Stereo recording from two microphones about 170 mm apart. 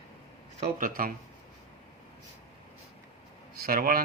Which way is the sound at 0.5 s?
55° right (ahead or behind).